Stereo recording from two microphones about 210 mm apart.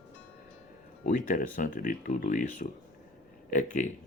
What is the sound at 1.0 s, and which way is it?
Speech, 40° left (ahead or behind).